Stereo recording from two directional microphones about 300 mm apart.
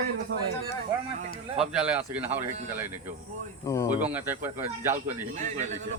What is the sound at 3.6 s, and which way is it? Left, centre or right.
Speech, centre.